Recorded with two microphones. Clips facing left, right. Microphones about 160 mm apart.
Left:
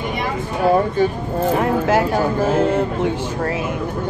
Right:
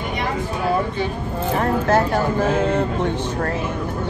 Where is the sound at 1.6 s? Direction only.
10° left (ahead or behind).